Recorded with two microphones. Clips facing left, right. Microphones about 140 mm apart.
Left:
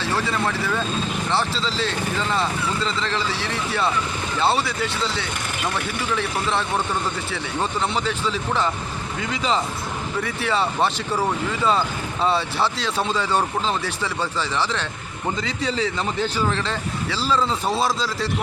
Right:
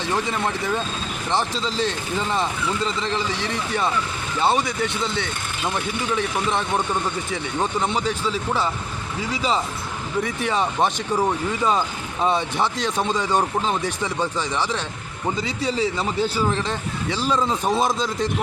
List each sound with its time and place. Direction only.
0.0 s a man's voice: 20° right (ahead or behind)
4.8 s speech: 55° right (ahead or behind)
6.1 s a man's voice: 15° right (ahead or behind)